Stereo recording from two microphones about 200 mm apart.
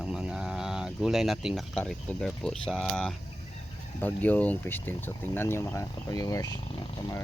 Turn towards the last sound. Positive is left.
turn(degrees=20)  # may be behind; listen again after turning